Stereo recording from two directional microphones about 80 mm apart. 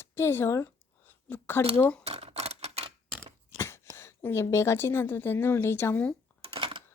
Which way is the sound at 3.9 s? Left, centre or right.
Left.